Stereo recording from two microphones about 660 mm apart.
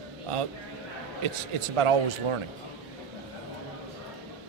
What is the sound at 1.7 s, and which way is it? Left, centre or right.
Speech, right.